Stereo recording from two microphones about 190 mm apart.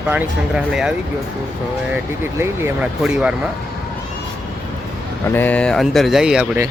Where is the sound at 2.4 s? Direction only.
10° right (ahead or behind).